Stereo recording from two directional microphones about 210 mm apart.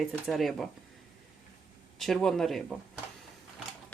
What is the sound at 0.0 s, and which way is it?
Speech, centre (ahead or behind).